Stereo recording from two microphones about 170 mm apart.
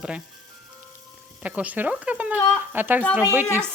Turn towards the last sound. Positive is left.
turn(degrees=-10)  # may be behind; listen again after turning